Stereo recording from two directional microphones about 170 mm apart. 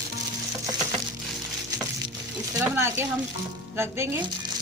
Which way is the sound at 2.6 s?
15° right (ahead or behind).